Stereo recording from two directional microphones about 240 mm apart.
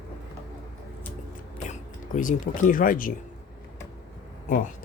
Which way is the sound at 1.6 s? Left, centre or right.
Left.